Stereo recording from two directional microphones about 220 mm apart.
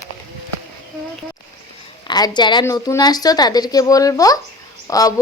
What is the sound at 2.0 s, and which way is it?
Speech, 20° left (ahead or behind).